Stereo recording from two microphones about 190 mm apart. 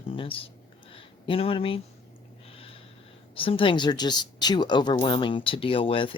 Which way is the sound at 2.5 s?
30° left (ahead or behind).